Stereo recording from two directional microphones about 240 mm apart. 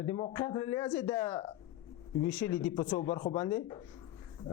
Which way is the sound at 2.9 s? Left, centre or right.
Centre.